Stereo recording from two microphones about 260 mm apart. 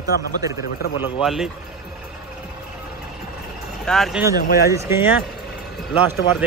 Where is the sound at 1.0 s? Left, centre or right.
Centre.